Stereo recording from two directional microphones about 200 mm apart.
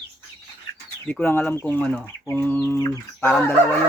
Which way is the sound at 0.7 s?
20° left (ahead or behind).